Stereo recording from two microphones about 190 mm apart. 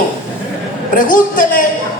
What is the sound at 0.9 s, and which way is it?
Speech, 45° left (ahead or behind).